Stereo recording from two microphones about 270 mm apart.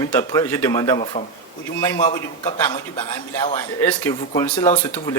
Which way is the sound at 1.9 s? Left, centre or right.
Centre.